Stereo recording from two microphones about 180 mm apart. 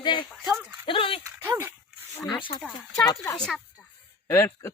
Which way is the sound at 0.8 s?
30° left (ahead or behind).